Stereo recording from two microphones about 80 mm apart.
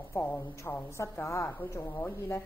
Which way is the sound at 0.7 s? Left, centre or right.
Left.